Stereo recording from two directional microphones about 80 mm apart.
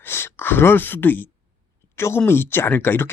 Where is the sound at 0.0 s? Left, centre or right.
Left.